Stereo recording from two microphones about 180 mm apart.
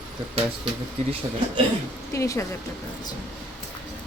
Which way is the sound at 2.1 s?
15° left (ahead or behind).